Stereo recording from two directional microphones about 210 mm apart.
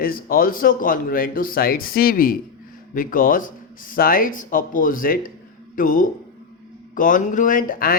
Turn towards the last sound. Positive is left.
turn(degrees=45)  # may be behind; listen again after turning